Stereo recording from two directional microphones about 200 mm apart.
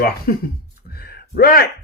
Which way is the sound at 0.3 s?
50° left (ahead or behind).